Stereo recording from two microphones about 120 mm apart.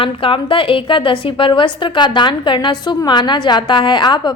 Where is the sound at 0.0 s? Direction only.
45° left (ahead or behind).